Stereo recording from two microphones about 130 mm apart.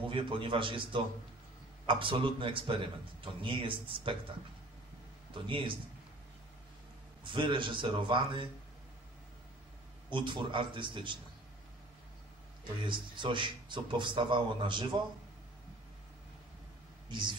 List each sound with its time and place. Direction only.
0.1 s a man's voice: 40° right (ahead or behind)
5.3 s a man's voice: 40° right (ahead or behind)
7.2 s a man's voice: 40° right (ahead or behind)
10.0 s a man's voice: 40° right (ahead or behind)
12.8 s a man's voice: 40° right (ahead or behind)
17.1 s a man's voice: 35° right (ahead or behind)